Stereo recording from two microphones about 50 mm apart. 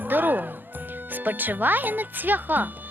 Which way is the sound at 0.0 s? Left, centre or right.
Right.